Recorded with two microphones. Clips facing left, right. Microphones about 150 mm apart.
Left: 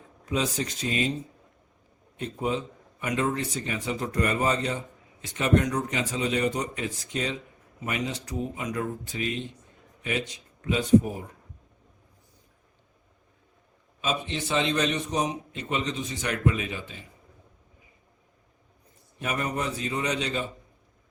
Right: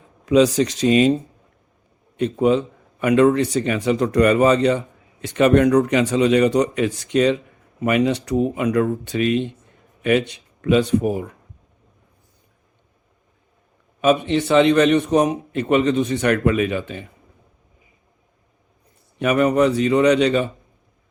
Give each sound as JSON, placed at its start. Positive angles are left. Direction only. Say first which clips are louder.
{"t": 0.3, "sound": "a man's voice", "louder": "right 13 dB", "side_deg": -85}
{"t": 14.0, "sound": "a man's voice", "louder": "right 13 dB", "side_deg": -60}
{"t": 19.2, "sound": "speech", "louder": "right 14 dB", "side_deg": -70}